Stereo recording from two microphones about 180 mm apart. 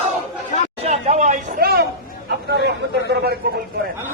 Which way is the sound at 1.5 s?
60° right (ahead or behind).